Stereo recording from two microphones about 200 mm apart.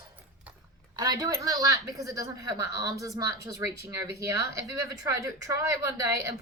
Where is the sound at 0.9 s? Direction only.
20° right (ahead or behind).